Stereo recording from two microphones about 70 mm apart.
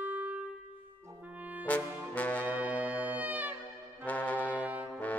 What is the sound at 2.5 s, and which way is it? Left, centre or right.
Brass instrument, right.